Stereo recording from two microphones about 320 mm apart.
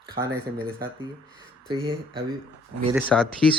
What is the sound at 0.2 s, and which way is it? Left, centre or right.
Speech, centre.